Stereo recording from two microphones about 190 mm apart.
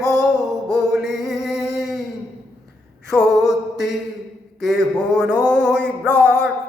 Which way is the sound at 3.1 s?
Centre (ahead or behind).